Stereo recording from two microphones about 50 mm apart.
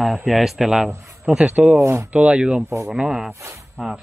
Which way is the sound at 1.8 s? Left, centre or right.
Right.